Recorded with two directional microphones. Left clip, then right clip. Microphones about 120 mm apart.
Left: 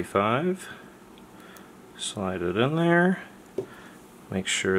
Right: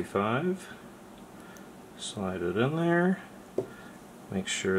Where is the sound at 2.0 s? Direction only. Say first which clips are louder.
Left 4 dB; 40° left (ahead or behind).